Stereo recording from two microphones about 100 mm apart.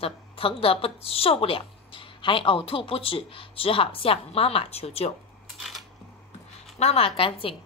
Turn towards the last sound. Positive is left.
turn(degrees=65)  # may be behind; listen again after turning